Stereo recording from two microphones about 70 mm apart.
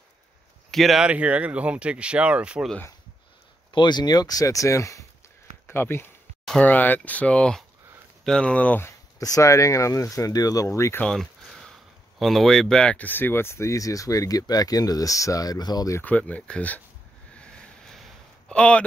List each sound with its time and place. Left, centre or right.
0.7 s speech: centre
1.0 s speech: centre
3.8 s speech: left
5.7 s speech: left
9.2 s speech: left
11.1 s a sound: centre
12.2 s speech: centre; by 15.9 s left
16.0 s speech: left
17.4 s vehicle: centre
18.5 s speech: centre